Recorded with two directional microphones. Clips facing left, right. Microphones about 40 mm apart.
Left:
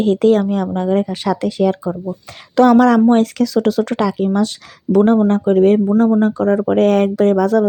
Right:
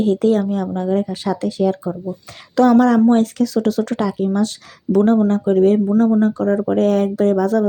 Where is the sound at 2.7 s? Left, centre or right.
Left.